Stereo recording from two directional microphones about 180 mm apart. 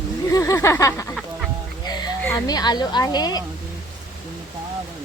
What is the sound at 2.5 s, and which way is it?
Speech, 20° left (ahead or behind).